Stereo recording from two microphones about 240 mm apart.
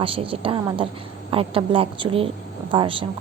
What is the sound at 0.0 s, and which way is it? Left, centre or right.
A woman's voice, right.